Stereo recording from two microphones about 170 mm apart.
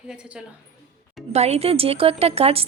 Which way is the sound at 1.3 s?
40° right (ahead or behind).